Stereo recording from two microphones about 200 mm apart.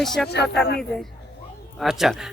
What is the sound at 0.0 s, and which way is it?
Speech, centre (ahead or behind).